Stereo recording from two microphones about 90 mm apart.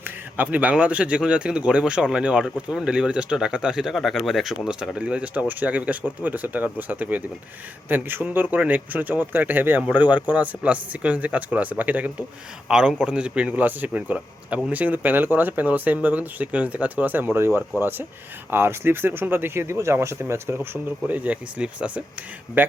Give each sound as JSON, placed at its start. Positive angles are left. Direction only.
{"t": 0.3, "sound": "speech", "side_deg": -15}
{"t": 21.1, "sound": "speech", "side_deg": -15}